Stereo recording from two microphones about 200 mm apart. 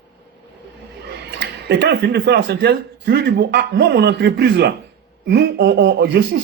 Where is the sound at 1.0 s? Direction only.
55° right (ahead or behind).